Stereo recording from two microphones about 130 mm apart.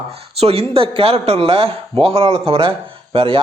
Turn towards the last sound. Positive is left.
turn(degrees=-45)  # may be behind; listen again after turning